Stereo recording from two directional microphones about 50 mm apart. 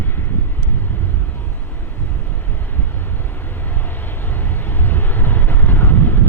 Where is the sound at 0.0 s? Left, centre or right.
Left.